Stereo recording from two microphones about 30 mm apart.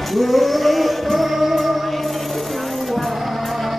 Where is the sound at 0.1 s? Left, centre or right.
Centre.